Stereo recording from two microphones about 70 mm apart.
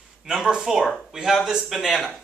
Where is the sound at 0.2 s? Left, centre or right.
Centre.